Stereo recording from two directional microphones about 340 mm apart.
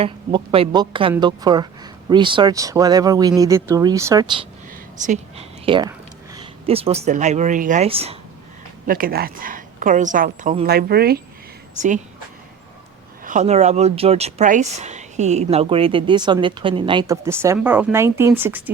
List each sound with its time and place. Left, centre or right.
0.0 s a woman's voice: centre
13.2 s speech: right